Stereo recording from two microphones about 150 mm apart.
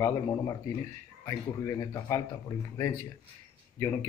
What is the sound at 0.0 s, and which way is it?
Speech, 25° left (ahead or behind).